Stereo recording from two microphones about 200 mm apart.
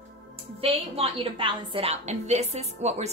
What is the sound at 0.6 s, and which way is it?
A woman's voice, 30° right (ahead or behind).